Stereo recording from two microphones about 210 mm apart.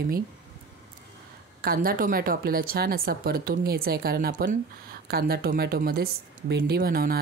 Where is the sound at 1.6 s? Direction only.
45° right (ahead or behind).